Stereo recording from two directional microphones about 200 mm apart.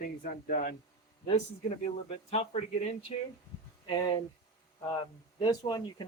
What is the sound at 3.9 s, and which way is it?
Speech, 20° left (ahead or behind).